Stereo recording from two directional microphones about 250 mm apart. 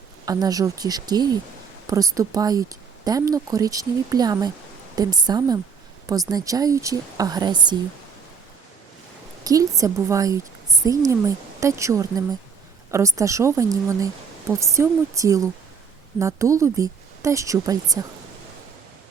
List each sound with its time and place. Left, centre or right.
0.3 s speech: centre
9.4 s speech: centre